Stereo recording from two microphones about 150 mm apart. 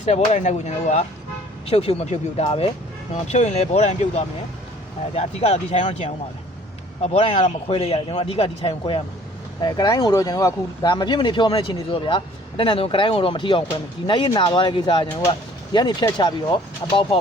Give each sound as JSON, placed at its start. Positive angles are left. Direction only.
{"t": 0.0, "sound": "speech", "side_deg": 50}
{"t": 9.6, "sound": "speech", "side_deg": 30}